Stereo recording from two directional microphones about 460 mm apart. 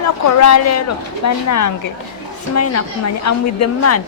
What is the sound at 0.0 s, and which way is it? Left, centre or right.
Speech, left.